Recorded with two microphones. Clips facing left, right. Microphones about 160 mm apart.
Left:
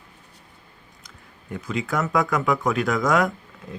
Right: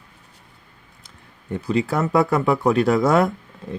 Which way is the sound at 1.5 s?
35° right (ahead or behind).